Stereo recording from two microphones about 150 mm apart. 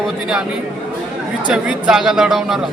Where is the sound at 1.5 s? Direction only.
5° right (ahead or behind).